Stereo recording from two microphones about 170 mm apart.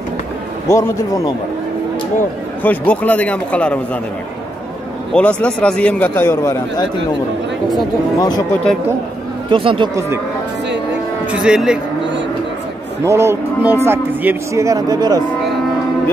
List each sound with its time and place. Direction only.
0.7 s a man's voice: 15° left (ahead or behind)
2.6 s a man's voice: 10° left (ahead or behind)
5.1 s a man's voice: 5° left (ahead or behind)
8.2 s speech: 20° left (ahead or behind)
9.5 s speech: 30° right (ahead or behind)
11.3 s speech: 5° right (ahead or behind)
13.0 s speech: 15° right (ahead or behind)